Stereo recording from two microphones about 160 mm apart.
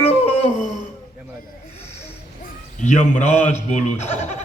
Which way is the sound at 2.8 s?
50° left (ahead or behind).